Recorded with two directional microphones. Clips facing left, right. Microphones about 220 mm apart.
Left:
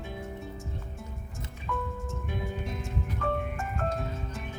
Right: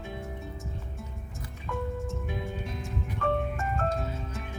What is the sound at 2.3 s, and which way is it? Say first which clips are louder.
Music: even; centre (ahead or behind).